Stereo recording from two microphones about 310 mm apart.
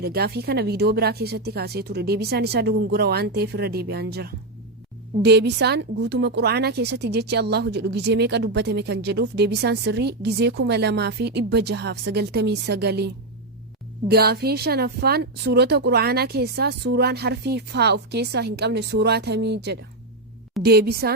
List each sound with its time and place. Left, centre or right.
0.0 s speech: right
14.1 s speech: right